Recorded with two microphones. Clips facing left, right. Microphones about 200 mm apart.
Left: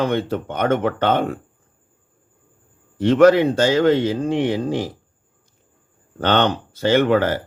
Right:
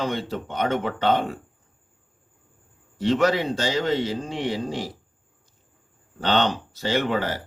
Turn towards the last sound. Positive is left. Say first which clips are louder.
# left 8 dB
turn(degrees=55)  # may be behind; listen again after turning